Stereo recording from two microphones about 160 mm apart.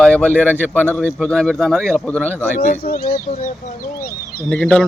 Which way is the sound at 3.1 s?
50° left (ahead or behind).